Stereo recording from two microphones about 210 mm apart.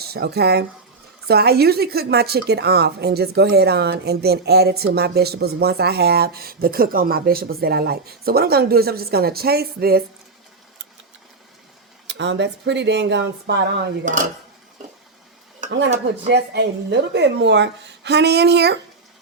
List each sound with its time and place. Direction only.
0.0 s a woman's voice: 50° right (ahead or behind)
12.0 s speech: 60° right (ahead or behind)
16.2 s a woman's voice: 55° right (ahead or behind)